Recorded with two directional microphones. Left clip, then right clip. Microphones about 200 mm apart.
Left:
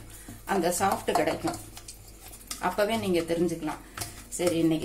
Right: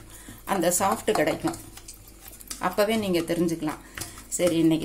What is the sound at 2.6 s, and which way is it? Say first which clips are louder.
Speech: right 3 dB; 45° right (ahead or behind).